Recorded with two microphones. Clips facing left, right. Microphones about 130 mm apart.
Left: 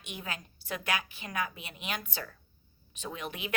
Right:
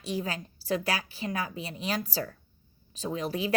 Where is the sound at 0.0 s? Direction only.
35° right (ahead or behind).